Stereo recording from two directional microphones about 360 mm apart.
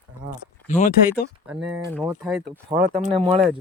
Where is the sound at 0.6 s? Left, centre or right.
Centre.